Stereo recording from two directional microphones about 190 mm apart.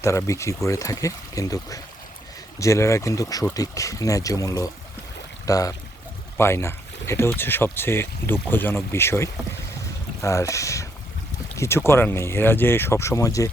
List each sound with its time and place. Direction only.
0.0 s speech: 15° left (ahead or behind)